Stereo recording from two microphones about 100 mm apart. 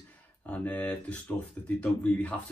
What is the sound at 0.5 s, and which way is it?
Speech, 15° left (ahead or behind).